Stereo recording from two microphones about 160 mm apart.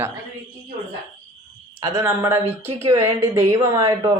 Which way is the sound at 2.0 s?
15° right (ahead or behind).